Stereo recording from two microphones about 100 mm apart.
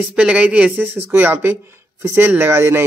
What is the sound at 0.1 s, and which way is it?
Speech, 10° right (ahead or behind).